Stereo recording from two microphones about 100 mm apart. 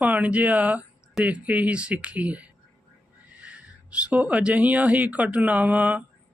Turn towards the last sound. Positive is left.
turn(degrees=-15)  # may be behind; listen again after turning